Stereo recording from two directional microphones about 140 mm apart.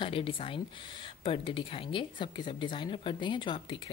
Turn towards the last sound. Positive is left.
turn(degrees=35)  # may be behind; listen again after turning